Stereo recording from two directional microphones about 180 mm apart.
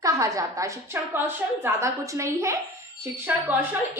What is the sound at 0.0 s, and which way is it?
A woman's voice, 20° right (ahead or behind).